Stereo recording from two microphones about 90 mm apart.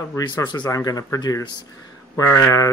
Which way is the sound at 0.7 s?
45° left (ahead or behind).